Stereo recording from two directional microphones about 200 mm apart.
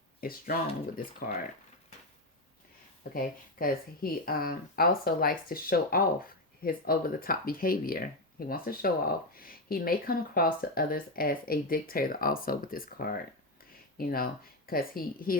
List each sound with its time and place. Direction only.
0.2 s speech: 45° left (ahead or behind)
3.2 s speech: 45° left (ahead or behind)